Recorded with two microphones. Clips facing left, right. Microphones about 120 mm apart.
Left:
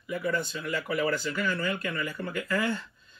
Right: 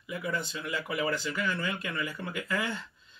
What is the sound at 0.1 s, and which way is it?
Speech, 20° right (ahead or behind).